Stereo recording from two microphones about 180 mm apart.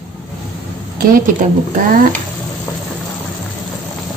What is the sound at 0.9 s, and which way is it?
Speech, 50° right (ahead or behind).